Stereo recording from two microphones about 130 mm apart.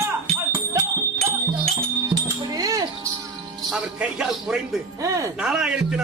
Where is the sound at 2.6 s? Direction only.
30° right (ahead or behind).